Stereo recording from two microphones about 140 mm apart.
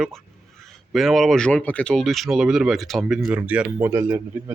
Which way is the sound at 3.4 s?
15° right (ahead or behind).